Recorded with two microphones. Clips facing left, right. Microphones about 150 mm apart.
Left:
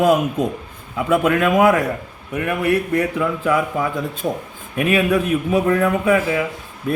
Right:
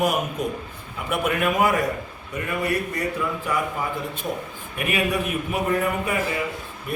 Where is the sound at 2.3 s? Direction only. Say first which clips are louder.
Left 6 dB; 70° left (ahead or behind).